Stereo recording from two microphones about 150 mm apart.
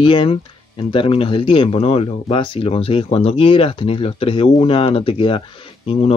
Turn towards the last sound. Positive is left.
turn(degrees=40)  # may be behind; listen again after turning